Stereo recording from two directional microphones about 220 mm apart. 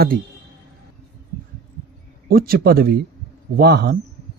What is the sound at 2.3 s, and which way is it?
Speech, 45° right (ahead or behind).